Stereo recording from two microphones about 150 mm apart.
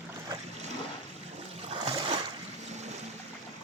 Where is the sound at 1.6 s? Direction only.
45° right (ahead or behind).